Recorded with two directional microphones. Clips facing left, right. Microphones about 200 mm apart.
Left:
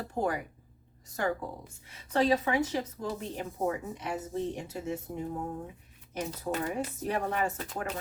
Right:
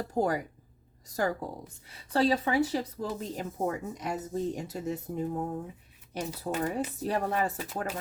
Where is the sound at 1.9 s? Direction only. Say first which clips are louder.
Even; 35° right (ahead or behind).